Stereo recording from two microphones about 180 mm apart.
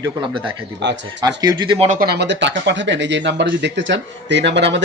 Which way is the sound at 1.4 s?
25° right (ahead or behind).